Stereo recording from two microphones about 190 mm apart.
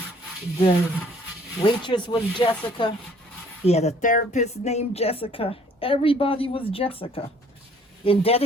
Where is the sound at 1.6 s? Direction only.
25° left (ahead or behind).